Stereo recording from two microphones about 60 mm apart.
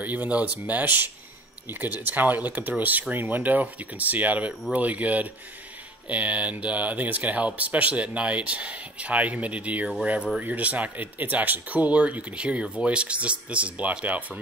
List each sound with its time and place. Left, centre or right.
0.0 s speech: right